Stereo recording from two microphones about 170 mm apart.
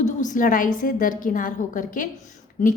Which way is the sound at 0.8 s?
50° left (ahead or behind).